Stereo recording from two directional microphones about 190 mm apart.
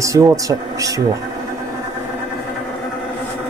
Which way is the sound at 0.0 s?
15° right (ahead or behind).